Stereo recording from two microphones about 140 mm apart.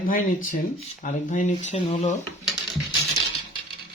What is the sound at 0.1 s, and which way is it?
Speech, 80° left.